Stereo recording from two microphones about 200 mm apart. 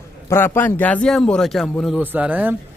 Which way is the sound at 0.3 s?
10° left (ahead or behind).